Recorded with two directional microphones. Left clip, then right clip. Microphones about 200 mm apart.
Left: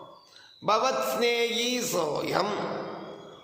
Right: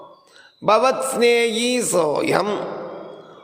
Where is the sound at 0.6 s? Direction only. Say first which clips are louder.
Right 8 dB; 35° right (ahead or behind).